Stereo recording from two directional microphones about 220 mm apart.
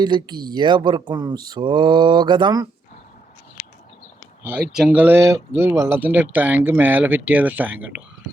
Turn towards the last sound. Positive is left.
turn(degrees=-10)  # may be behind; listen again after turning